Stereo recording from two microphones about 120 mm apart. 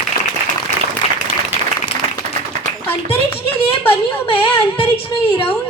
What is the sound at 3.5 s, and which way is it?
A woman's voice, 50° left (ahead or behind).